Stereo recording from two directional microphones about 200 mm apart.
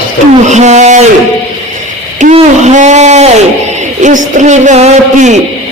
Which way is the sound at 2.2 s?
35° right (ahead or behind).